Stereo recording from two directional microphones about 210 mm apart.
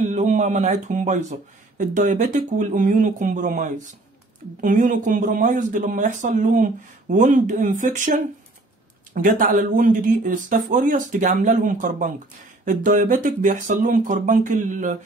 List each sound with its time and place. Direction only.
0.0 s speech: 35° right (ahead or behind)